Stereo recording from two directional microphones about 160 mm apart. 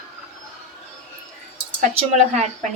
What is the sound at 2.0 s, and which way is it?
Speech, 45° right (ahead or behind).